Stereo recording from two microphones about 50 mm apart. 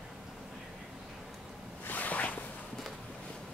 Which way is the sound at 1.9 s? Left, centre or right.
Left.